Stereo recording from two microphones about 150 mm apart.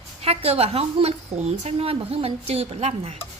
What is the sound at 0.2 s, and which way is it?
A woman's voice, 45° right (ahead or behind).